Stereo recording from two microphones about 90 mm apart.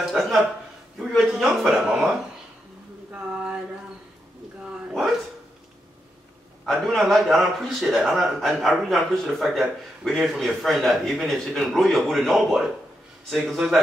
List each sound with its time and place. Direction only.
0.0 s a man's voice: centre (ahead or behind)
3.1 s a sound: 10° right (ahead or behind)
6.6 s a man's voice: centre (ahead or behind)